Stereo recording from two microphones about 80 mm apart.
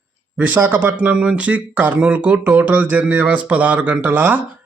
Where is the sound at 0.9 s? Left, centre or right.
Centre.